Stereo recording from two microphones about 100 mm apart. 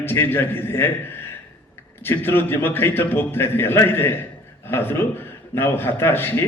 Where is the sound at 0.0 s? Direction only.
20° left (ahead or behind).